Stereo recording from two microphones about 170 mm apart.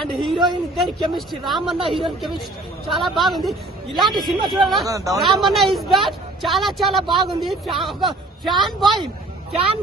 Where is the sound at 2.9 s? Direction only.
Centre (ahead or behind).